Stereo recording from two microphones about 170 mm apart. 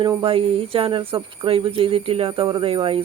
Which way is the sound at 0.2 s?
35° right (ahead or behind).